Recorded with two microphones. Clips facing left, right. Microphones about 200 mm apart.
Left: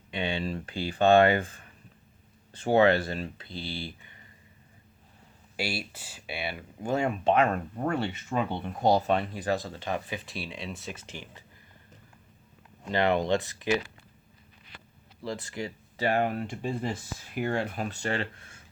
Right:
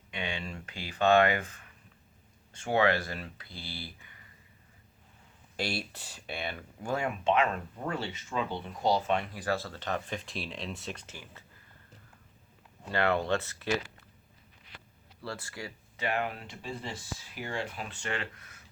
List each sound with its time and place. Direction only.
0.1 s speech: 30° left (ahead or behind)
5.5 s speech: 5° left (ahead or behind)
6.8 s speech: 25° left (ahead or behind)
7.3 s speech: 45° left (ahead or behind); by 11.0 s centre (ahead or behind)
11.0 s speech: 15° left (ahead or behind)
12.9 s speech: 20° left (ahead or behind)
15.2 s speech: 15° left (ahead or behind)
16.0 s speech: 40° left (ahead or behind)